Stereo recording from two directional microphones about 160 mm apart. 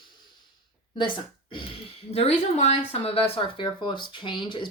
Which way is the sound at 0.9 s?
30° left (ahead or behind).